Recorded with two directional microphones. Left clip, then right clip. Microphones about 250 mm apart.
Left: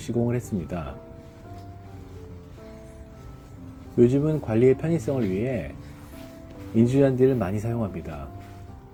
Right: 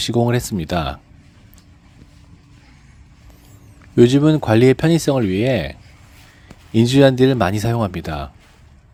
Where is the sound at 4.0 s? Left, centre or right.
Right.